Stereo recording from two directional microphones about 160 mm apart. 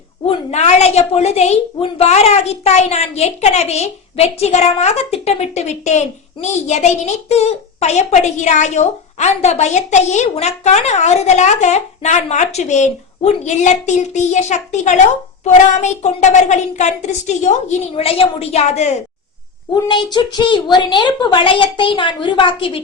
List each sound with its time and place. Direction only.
0.3 s a woman's voice: 45° left (ahead or behind)
17.9 s a woman's voice: 35° left (ahead or behind)
19.7 s a woman's voice: 30° left (ahead or behind)